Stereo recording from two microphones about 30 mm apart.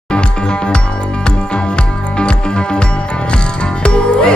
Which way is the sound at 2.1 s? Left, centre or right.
Left.